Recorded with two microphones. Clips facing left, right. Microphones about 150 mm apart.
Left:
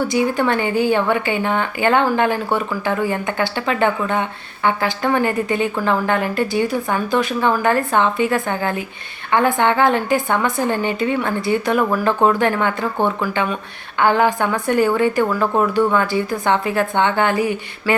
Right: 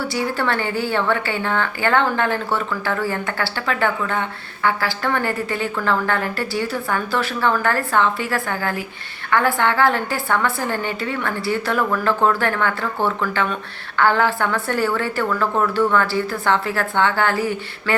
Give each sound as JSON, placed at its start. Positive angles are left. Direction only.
{"t": 0.1, "sound": "a woman's voice", "side_deg": 15}